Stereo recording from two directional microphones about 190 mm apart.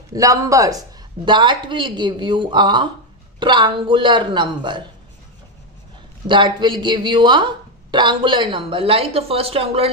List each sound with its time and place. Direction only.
0.1 s a woman's voice: 15° right (ahead or behind)
6.2 s a woman's voice: 25° right (ahead or behind)